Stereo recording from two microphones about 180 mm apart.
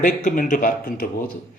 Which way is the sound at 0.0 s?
45° left (ahead or behind).